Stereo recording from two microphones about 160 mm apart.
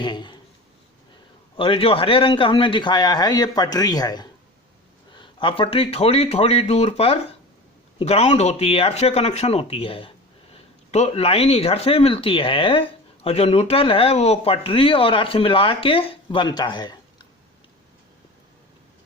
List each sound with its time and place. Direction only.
0.0 s speech: 30° left (ahead or behind)
1.5 s a man's voice: 35° left (ahead or behind)